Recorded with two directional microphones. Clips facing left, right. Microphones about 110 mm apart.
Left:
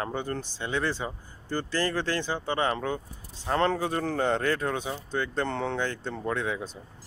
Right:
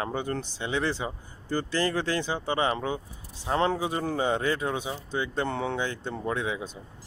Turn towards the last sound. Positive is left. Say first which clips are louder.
# even
turn(degrees=-15)  # may be behind; listen again after turning